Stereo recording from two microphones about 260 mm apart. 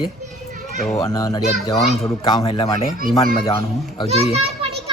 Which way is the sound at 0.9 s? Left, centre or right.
Centre.